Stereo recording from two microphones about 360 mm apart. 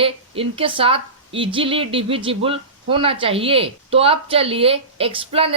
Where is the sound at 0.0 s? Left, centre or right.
Centre.